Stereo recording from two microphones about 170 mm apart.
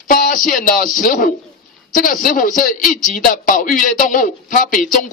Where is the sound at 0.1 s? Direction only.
50° left (ahead or behind).